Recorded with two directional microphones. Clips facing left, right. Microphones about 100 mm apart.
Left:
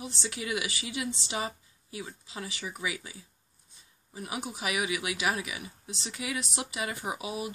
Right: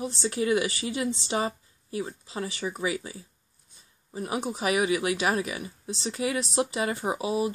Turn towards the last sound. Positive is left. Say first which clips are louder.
# right 8 dB
turn(degrees=-35)  # may be behind; listen again after turning